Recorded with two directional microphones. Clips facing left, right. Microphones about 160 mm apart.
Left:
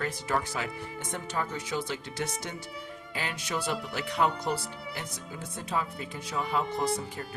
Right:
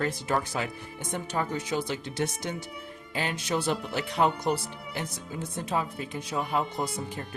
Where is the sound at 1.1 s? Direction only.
20° right (ahead or behind).